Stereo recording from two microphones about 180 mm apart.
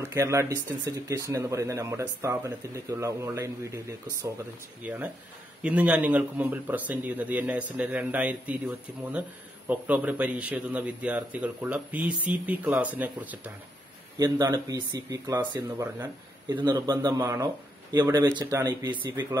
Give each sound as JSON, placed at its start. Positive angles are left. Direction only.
{"t": 0.1, "sound": "speech", "side_deg": -15}
{"t": 14.1, "sound": "speech", "side_deg": -20}